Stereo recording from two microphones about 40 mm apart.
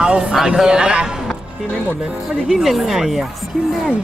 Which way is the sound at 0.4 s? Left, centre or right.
Centre.